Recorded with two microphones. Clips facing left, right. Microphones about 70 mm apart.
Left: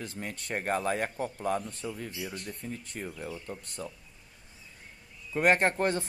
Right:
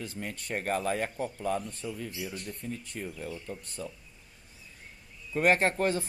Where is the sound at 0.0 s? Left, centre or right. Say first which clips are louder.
Even; left.